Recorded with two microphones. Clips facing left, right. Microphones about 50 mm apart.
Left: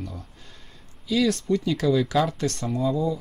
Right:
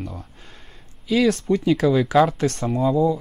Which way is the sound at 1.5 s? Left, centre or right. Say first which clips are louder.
Right 4 dB; right.